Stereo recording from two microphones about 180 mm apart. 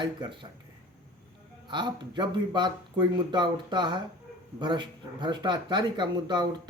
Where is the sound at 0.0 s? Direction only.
25° right (ahead or behind).